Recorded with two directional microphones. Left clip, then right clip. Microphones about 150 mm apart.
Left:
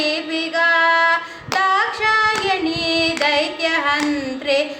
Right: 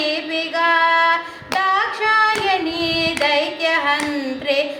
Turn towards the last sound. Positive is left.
turn(degrees=15)  # may be behind; listen again after turning